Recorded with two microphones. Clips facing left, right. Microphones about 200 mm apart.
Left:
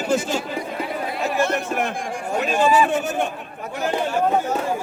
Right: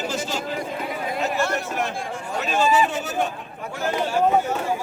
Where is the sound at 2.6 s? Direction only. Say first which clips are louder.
Left 2 dB; 55° left (ahead or behind).